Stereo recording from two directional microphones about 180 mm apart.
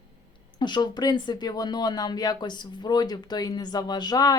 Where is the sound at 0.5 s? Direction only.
25° left (ahead or behind).